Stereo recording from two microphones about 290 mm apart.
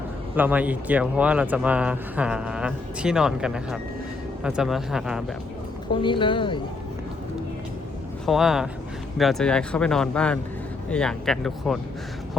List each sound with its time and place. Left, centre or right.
0.3 s speech: centre
5.9 s speech: centre
8.3 s speech: centre